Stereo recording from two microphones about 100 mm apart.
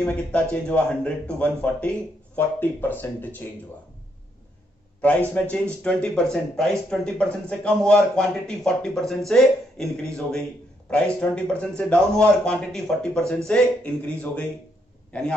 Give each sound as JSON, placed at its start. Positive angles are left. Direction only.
{"t": 0.0, "sound": "speech", "side_deg": 15}
{"t": 5.0, "sound": "speech", "side_deg": 15}
{"t": 10.9, "sound": "speech", "side_deg": 10}